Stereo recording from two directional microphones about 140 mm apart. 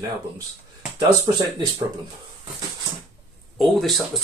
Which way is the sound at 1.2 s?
35° right (ahead or behind).